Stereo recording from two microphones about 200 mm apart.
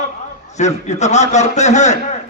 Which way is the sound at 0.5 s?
35° left (ahead or behind).